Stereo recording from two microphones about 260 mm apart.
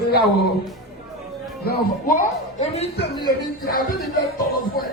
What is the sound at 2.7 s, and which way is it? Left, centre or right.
Speech, left.